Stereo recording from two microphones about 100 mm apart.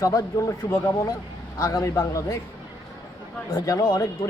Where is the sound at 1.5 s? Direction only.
35° left (ahead or behind).